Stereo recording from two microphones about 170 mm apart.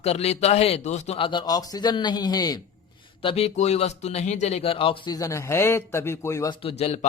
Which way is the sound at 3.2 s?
35° left (ahead or behind).